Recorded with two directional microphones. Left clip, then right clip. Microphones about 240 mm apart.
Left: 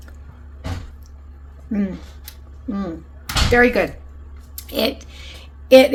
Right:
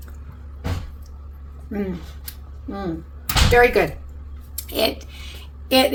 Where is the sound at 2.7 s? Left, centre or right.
Left.